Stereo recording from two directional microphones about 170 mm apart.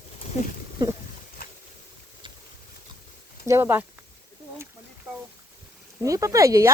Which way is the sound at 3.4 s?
15° right (ahead or behind).